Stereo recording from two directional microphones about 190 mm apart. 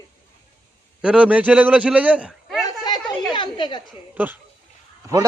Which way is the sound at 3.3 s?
25° left (ahead or behind).